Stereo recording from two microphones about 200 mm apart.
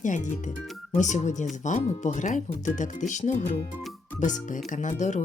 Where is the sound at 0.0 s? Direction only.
40° left (ahead or behind).